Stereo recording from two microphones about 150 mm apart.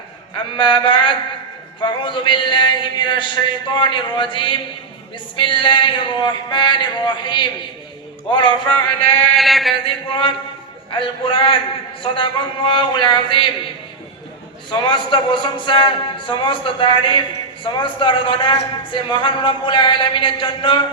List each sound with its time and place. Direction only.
0.5 s a man's voice: 35° left (ahead or behind)
9.4 s a sound: centre (ahead or behind)
9.8 s a man's voice: 35° left (ahead or behind)
14.7 s a man's voice: 30° left (ahead or behind)